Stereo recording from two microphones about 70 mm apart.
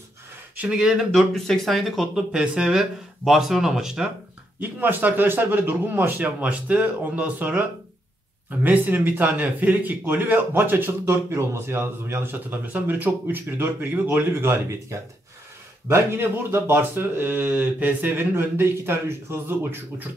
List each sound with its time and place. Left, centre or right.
0.6 s speech: centre
1.1 s speech: centre
2.1 s speech: centre
4.6 s speech: right